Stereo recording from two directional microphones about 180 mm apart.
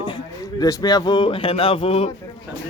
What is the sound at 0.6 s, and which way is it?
Speech, 20° left (ahead or behind).